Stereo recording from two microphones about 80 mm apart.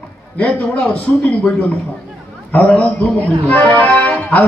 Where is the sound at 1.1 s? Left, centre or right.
Left.